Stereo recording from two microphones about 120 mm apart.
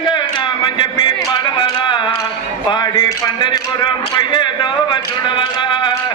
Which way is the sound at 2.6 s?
35° left (ahead or behind).